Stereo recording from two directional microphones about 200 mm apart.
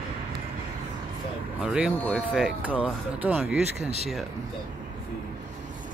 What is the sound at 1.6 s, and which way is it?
Speech, 5° right (ahead or behind).